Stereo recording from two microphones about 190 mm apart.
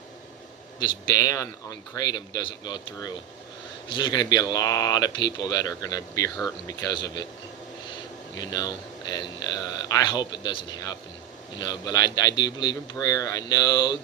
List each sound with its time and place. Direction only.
0.8 s a man's voice: 20° left (ahead or behind)
8.4 s speech: 20° left (ahead or behind)